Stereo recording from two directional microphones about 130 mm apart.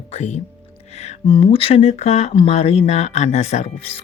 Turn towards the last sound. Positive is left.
turn(degrees=50)  # may be behind; listen again after turning